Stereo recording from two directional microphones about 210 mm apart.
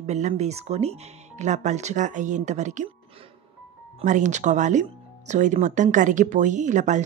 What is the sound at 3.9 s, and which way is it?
Speech, 35° right (ahead or behind).